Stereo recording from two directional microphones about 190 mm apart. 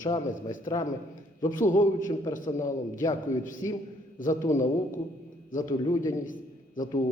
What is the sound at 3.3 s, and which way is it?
A man's voice, 15° left (ahead or behind).